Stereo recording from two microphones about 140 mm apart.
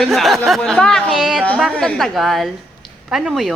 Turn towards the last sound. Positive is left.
turn(degrees=0)  # may be behind; listen again after turning